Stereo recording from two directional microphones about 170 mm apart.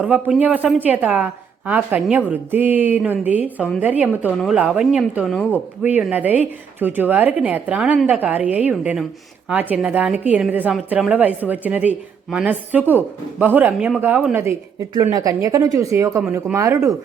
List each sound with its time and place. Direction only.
0.0 s a woman's voice: 10° right (ahead or behind)
14.9 s a woman's voice: 20° right (ahead or behind)